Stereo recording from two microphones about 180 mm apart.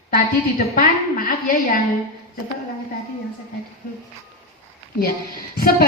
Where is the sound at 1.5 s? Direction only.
50° left (ahead or behind).